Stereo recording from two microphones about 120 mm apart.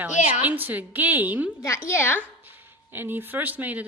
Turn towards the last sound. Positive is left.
turn(degrees=-15)  # may be behind; listen again after turning